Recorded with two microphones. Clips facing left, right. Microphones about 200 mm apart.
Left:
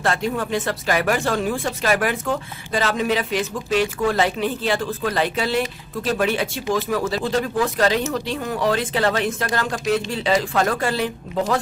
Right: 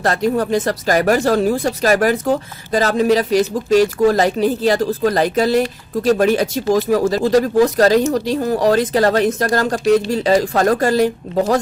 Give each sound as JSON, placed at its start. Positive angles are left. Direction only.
{"t": 0.0, "sound": "speech", "side_deg": -40}